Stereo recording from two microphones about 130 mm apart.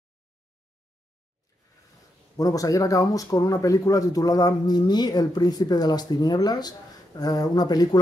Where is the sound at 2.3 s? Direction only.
25° left (ahead or behind).